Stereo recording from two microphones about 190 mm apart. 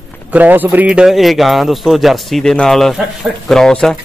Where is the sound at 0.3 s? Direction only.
10° right (ahead or behind).